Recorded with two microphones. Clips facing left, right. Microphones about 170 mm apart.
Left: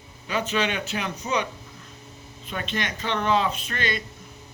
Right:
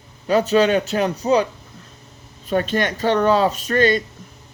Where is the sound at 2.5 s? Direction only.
45° right (ahead or behind).